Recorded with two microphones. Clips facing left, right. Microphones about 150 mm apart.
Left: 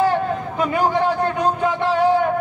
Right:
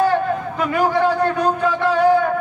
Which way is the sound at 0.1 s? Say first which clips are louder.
Right 2 dB; 20° left (ahead or behind).